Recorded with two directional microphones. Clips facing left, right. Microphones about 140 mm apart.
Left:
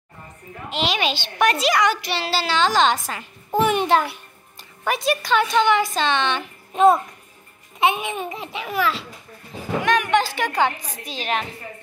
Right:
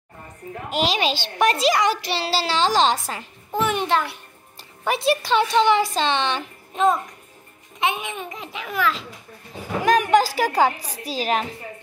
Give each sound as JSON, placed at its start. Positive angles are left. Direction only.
{"t": 0.7, "sound": "a child's voice", "side_deg": -40}
{"t": 3.6, "sound": "a child's voice", "side_deg": 10}
{"t": 4.6, "sound": "a child's voice", "side_deg": -30}
{"t": 8.0, "sound": "a child's voice", "side_deg": 30}
{"t": 8.3, "sound": "a child's voice", "side_deg": 5}
{"t": 9.8, "sound": "a child's voice", "side_deg": -35}